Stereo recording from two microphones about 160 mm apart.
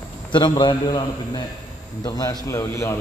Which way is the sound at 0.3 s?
30° left (ahead or behind).